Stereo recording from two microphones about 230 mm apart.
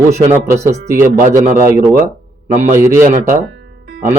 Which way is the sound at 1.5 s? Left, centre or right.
Right.